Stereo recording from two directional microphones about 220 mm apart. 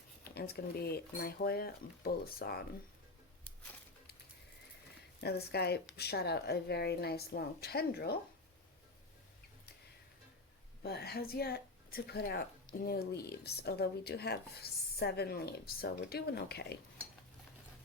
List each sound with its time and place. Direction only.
0.3 s speech: 45° left (ahead or behind)
5.2 s speech: 45° left (ahead or behind)
10.8 s speech: 45° left (ahead or behind)